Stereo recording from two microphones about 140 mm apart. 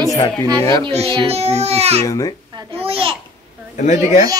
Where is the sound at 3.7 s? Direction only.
55° left (ahead or behind).